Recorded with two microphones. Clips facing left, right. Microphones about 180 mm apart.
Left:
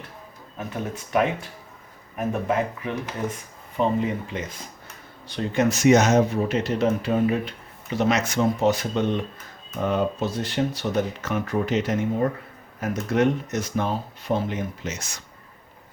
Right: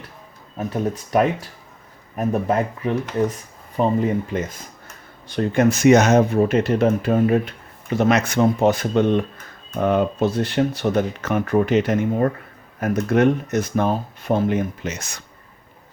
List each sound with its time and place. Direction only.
0.7 s speech: 40° right (ahead or behind); by 15.2 s 60° right (ahead or behind)